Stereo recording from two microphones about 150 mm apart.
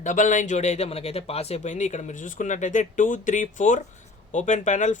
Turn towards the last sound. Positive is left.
turn(degrees=55)  # may be behind; listen again after turning